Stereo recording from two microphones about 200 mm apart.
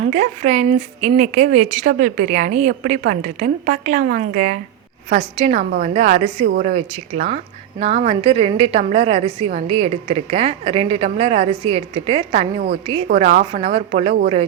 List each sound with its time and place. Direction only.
0.0 s a woman's voice: 40° right (ahead or behind)
6.4 s a woman's voice: 45° right (ahead or behind)